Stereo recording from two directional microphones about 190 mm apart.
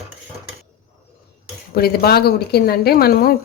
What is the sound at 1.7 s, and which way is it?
Speech, 55° left (ahead or behind).